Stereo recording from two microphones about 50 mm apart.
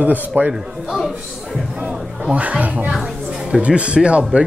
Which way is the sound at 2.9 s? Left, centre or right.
Centre.